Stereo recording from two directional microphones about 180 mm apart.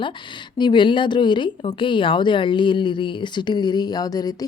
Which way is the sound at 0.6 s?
25° left (ahead or behind).